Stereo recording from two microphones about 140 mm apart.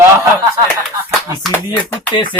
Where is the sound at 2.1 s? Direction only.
35° left (ahead or behind).